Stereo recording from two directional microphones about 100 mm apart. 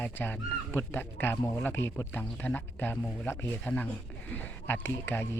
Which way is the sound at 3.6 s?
10° left (ahead or behind).